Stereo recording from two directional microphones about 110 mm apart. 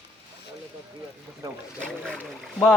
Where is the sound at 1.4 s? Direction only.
25° right (ahead or behind).